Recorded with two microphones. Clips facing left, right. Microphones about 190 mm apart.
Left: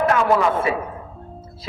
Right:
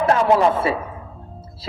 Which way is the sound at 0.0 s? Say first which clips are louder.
Right 2 dB; 30° right (ahead or behind).